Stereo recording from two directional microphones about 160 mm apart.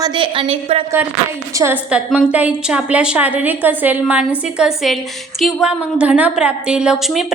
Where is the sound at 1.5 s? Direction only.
15° right (ahead or behind).